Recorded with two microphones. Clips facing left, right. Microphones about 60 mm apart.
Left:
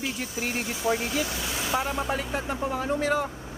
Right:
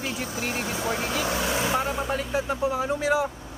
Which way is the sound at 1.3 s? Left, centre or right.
Right.